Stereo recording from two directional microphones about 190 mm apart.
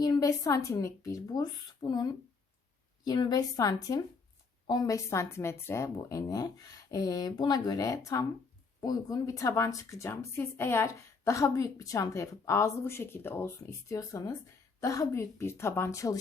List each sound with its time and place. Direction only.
0.0 s a woman's voice: 20° left (ahead or behind)